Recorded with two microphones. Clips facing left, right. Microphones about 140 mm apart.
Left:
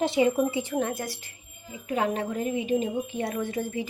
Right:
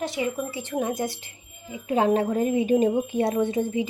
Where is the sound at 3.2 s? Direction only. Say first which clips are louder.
Right 7 dB; 25° right (ahead or behind).